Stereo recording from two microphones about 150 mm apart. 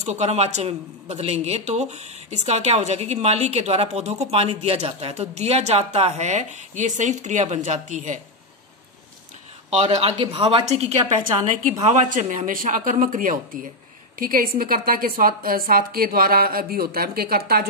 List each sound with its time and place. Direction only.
0.0 s speech: 50° right (ahead or behind)
9.7 s a woman's voice: 45° right (ahead or behind); by 17.6 s 90° right